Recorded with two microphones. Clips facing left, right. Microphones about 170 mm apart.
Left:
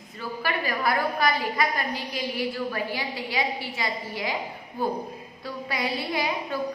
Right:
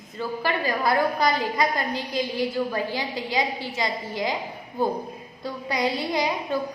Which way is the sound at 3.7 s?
25° right (ahead or behind).